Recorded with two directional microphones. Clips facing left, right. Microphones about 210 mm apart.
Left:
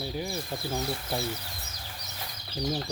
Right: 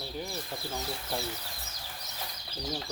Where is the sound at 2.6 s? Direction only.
10° left (ahead or behind).